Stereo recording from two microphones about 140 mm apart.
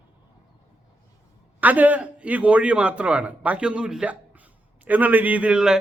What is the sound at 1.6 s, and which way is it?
A man's voice, 10° right (ahead or behind).